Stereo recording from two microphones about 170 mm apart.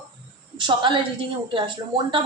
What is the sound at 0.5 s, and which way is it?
A woman's voice, 25° right (ahead or behind).